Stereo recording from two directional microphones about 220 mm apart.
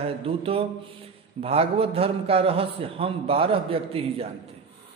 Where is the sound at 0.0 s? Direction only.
25° right (ahead or behind).